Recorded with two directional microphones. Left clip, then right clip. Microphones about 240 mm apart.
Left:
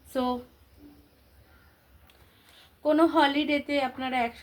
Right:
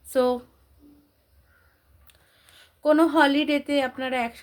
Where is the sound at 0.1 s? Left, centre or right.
Right.